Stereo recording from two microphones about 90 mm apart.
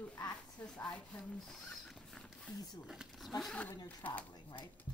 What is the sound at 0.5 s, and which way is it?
Speech, 10° left (ahead or behind).